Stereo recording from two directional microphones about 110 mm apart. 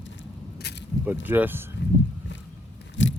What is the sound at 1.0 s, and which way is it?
Speech, 20° right (ahead or behind).